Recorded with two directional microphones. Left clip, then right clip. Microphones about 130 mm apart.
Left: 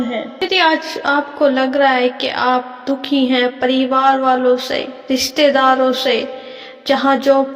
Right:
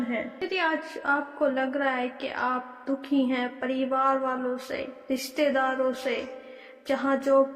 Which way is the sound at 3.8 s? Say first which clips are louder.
Left 11 dB; 60° left (ahead or behind).